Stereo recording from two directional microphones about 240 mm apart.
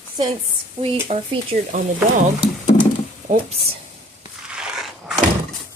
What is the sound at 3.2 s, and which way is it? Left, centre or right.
Speech, right.